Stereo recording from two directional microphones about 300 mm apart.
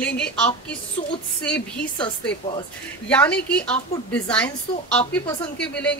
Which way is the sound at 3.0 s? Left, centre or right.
Centre.